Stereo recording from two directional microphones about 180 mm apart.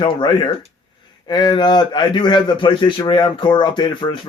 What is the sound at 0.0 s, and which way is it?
Speech, 25° left (ahead or behind).